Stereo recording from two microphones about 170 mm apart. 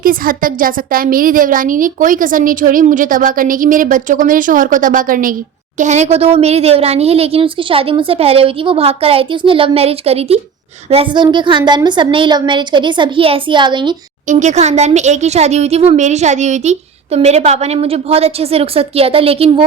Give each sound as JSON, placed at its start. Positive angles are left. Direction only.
{"t": 0.0, "sound": "a woman's voice", "side_deg": -55}
{"t": 5.8, "sound": "a woman's voice", "side_deg": -45}
{"t": 14.3, "sound": "speech", "side_deg": -45}